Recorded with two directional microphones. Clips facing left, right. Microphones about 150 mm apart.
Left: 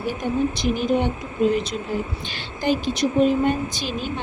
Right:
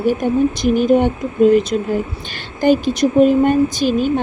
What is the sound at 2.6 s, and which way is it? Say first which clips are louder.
A woman's voice: right 8 dB; 50° right (ahead or behind).